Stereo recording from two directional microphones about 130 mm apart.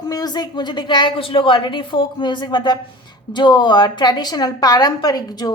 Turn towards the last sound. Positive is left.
turn(degrees=30)  # may be behind; listen again after turning